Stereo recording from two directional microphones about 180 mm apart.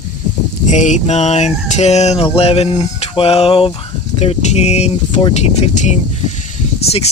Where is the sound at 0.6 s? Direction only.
40° left (ahead or behind).